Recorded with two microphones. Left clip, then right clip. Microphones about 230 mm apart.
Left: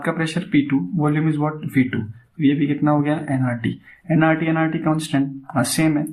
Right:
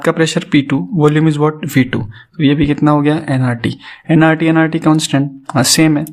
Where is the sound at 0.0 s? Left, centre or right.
Right.